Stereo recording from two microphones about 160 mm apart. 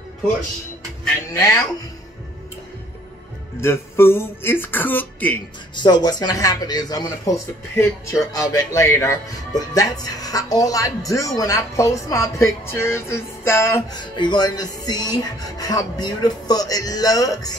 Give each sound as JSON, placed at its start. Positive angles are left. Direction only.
{"t": 1.3, "sound": "speech", "side_deg": 20}
{"t": 3.6, "sound": "speech", "side_deg": 15}
{"t": 5.8, "sound": "speech", "side_deg": 25}
{"t": 13.9, "sound": "speech", "side_deg": 25}